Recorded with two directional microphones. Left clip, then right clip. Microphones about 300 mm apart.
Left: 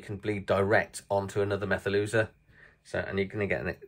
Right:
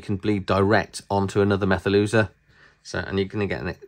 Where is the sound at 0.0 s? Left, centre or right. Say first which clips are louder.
Right 8 dB; centre.